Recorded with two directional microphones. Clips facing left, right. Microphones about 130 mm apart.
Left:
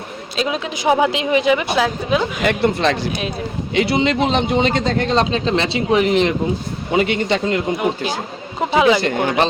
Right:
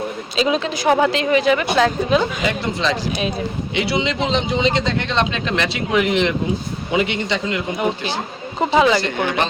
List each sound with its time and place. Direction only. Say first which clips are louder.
0.3 s a woman's voice: right 3 dB; 5° left (ahead or behind)
2.4 s speech: left 4 dB; 55° left (ahead or behind)
3.8 s a man's voice: left 4 dB; 45° left (ahead or behind)
8.6 s a woman's voice: left 1 dB; 10° left (ahead or behind)
9.0 s a man's voice: left 2 dB; 50° left (ahead or behind)